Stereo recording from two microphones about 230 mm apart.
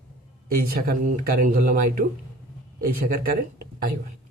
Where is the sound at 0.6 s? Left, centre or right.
Right.